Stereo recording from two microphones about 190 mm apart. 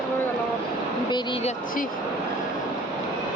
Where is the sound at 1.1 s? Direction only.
25° left (ahead or behind).